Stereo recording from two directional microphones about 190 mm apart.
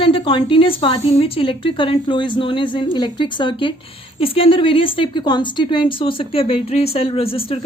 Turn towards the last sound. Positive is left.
turn(degrees=30)  # may be behind; listen again after turning